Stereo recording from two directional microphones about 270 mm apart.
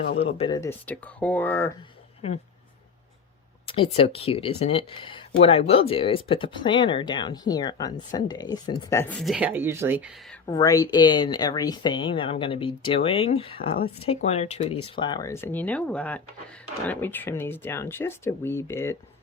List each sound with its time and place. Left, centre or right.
0.2 s speech: left
3.7 s speech: left; by 10.1 s centre
10.4 s speech: centre